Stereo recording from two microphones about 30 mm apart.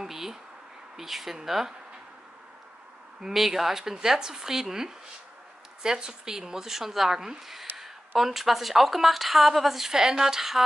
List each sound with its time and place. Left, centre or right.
0.0 s a sound: centre
0.9 s speech: centre
3.3 s speech: centre